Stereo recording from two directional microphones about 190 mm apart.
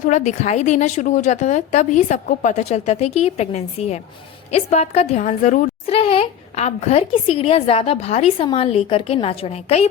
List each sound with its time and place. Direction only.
0.0 s a woman's voice: 40° left (ahead or behind)